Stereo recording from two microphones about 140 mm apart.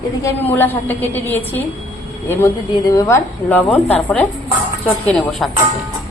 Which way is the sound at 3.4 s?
10° left (ahead or behind).